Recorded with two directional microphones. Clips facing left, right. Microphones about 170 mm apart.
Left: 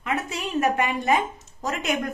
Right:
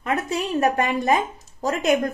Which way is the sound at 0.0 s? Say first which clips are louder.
Right 4 dB; 40° right (ahead or behind).